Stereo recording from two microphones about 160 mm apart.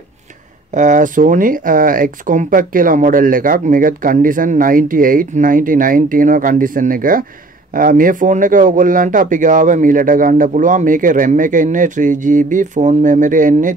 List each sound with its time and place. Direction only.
0.7 s speech: 50° right (ahead or behind)